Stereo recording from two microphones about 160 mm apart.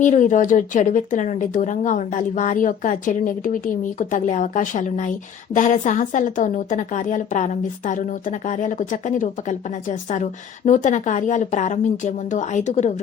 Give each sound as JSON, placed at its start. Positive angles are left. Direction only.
{"t": 0.0, "sound": "speech", "side_deg": 50}